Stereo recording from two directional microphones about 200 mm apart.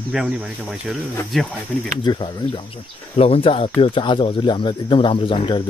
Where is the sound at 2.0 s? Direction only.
25° left (ahead or behind).